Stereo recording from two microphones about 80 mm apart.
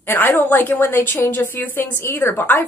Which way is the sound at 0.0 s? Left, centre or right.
Left.